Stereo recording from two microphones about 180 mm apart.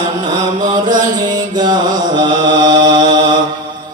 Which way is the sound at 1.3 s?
25° right (ahead or behind).